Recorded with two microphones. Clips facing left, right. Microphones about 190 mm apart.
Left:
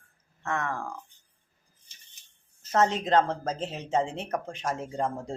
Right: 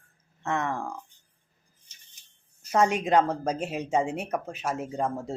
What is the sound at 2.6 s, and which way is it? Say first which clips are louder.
A woman's voice: right 1 dB; 10° right (ahead or behind).